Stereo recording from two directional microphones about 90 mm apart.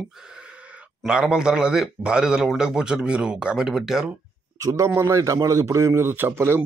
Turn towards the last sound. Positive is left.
turn(degrees=-25)  # may be behind; listen again after turning